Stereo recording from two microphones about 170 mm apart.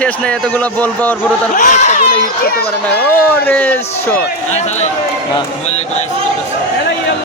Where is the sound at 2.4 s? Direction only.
65° left (ahead or behind).